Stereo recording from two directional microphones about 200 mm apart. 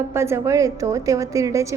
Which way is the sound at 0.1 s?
15° right (ahead or behind).